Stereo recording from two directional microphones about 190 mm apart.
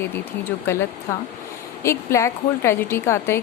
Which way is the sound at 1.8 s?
15° left (ahead or behind).